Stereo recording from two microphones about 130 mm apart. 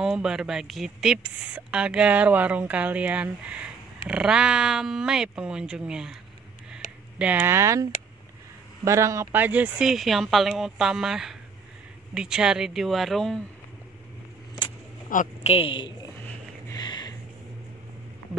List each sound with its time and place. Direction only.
0.0 s speech: 5° right (ahead or behind)
6.8 s a sound: 75° left (ahead or behind)
7.2 s speech: 15° right (ahead or behind)
15.1 s a woman's voice: 90° left
15.4 s a woman's voice: 45° left (ahead or behind)
16.7 s music: 35° left (ahead or behind)